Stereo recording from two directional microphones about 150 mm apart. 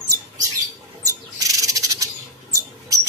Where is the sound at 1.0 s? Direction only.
20° right (ahead or behind).